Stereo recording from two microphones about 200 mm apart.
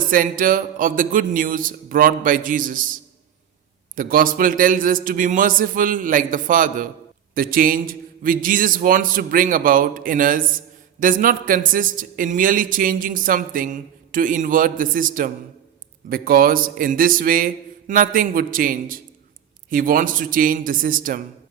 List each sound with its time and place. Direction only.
0.1 s speech: 45° right (ahead or behind)